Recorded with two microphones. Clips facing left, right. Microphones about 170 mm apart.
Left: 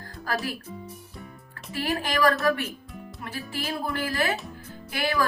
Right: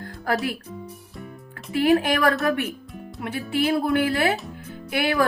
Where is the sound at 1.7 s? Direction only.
60° right (ahead or behind).